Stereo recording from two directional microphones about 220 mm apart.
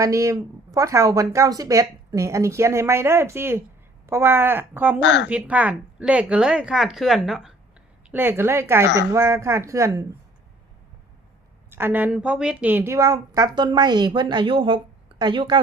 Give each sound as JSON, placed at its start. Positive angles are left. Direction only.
{"t": 0.0, "sound": "speech", "side_deg": -15}
{"t": 4.9, "sound": "speech", "side_deg": 55}
{"t": 5.3, "sound": "speech", "side_deg": -5}
{"t": 11.7, "sound": "speech", "side_deg": -10}